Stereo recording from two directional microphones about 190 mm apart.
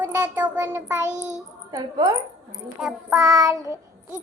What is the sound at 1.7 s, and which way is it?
Speech, 20° right (ahead or behind).